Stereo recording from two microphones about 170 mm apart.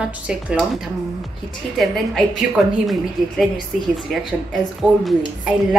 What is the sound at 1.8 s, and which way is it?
Speech, centre (ahead or behind).